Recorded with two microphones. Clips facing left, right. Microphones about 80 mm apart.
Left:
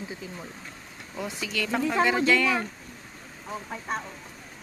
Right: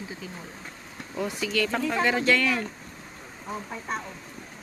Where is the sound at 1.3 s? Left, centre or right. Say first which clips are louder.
Right 1 dB; centre.